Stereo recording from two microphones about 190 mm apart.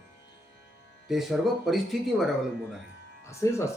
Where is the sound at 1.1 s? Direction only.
Centre (ahead or behind).